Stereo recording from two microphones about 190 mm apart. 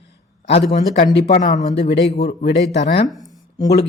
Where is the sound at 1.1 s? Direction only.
55° left (ahead or behind).